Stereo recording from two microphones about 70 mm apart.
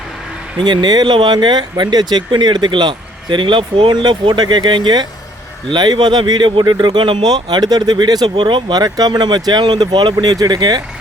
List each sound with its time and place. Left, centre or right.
0.6 s speech: right